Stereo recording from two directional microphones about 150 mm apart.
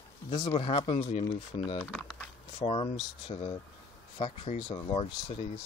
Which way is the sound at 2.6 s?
40° left (ahead or behind).